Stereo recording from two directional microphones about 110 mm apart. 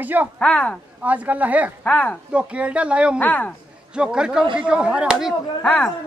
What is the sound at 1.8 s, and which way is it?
Speech, 10° left (ahead or behind).